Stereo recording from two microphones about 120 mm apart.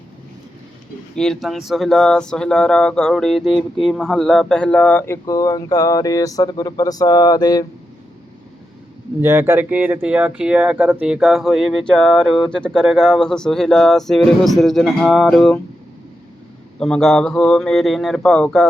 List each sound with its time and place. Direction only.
1.1 s speech: 5° left (ahead or behind); by 7.7 s 30° left (ahead or behind)
9.2 s speech: 20° right (ahead or behind); by 15.5 s centre (ahead or behind)
16.8 s speech: 5° left (ahead or behind)